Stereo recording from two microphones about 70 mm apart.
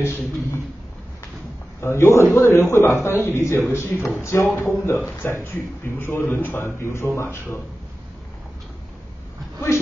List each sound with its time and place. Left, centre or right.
0.0 s a sound: left
1.8 s a man's voice: left
4.6 s a man's voice: left